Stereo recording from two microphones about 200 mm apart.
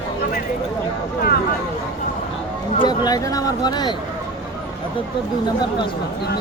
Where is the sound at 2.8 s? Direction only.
20° left (ahead or behind).